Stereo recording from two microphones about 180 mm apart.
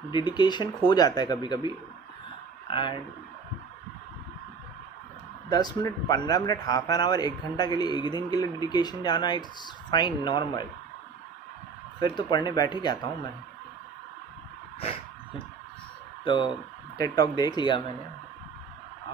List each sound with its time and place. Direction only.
0.1 s a man's voice: 25° left (ahead or behind)
2.7 s a man's voice: 25° left (ahead or behind)
5.5 s a man's voice: 20° left (ahead or behind)
12.0 s a man's voice: 25° left (ahead or behind)
14.8 s a sound: 35° left (ahead or behind)
16.3 s a man's voice: 25° left (ahead or behind)